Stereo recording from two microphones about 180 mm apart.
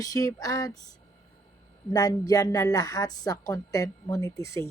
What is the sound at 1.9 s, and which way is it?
A woman's voice, 20° left (ahead or behind).